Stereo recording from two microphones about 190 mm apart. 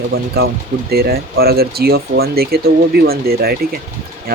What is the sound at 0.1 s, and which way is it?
Speech, 55° right (ahead or behind).